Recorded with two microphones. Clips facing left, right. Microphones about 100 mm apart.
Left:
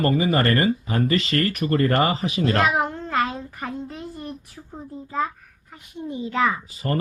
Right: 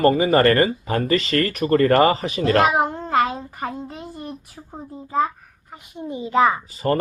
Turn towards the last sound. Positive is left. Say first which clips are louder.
# right 5 dB
turn(degrees=-35)  # may be behind; listen again after turning